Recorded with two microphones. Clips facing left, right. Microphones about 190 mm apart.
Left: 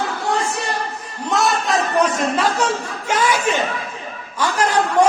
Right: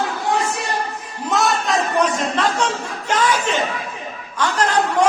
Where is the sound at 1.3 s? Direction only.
Centre (ahead or behind).